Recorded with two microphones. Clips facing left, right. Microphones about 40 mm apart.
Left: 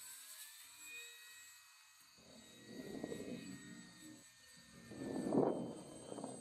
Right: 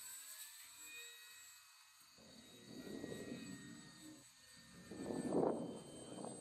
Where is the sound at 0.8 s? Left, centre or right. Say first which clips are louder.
Left 3 dB; centre.